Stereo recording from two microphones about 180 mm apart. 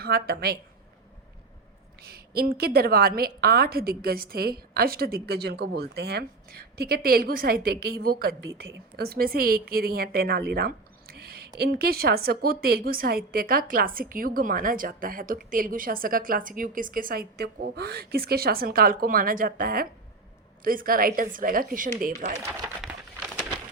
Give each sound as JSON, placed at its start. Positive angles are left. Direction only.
{"t": 0.0, "sound": "a woman's voice", "side_deg": -60}
{"t": 2.0, "sound": "a woman's voice", "side_deg": -60}
{"t": 22.8, "sound": "a sound", "side_deg": -5}